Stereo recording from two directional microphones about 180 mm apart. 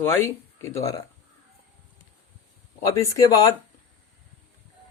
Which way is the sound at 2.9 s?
15° left (ahead or behind).